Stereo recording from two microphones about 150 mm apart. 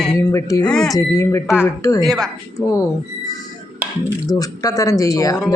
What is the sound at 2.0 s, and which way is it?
Speech, centre (ahead or behind).